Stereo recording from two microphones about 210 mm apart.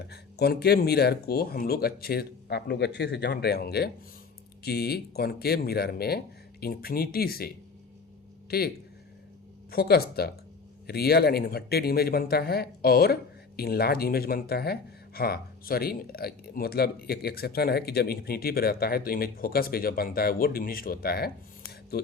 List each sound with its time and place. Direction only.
0.1 s speech: 50° left (ahead or behind)
9.7 s speech: 50° left (ahead or behind)